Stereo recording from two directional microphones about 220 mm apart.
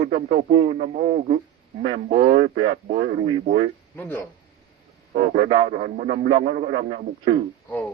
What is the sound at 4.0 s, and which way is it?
Speech, 10° left (ahead or behind).